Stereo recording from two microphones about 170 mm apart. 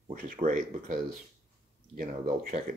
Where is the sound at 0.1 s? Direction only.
55° right (ahead or behind).